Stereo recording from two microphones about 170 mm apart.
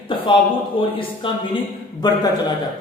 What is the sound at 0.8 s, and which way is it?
Speech, 30° left (ahead or behind).